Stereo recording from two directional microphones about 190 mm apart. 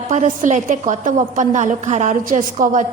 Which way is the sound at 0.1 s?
40° right (ahead or behind).